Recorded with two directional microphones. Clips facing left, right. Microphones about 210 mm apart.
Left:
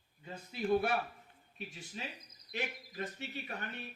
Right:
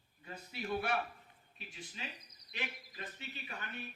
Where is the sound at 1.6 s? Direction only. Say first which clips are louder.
Left 4 dB; 45° left (ahead or behind).